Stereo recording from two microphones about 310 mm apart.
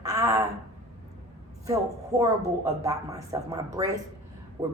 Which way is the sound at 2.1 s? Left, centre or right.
Centre.